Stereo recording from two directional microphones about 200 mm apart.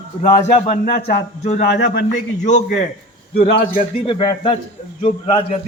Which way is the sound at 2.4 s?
40° left (ahead or behind).